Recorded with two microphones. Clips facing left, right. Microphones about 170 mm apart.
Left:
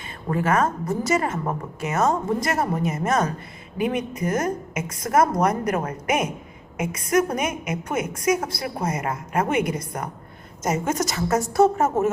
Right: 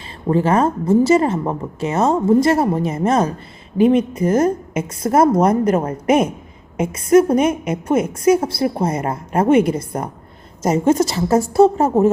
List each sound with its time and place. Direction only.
0.3 s a woman's voice: 30° right (ahead or behind)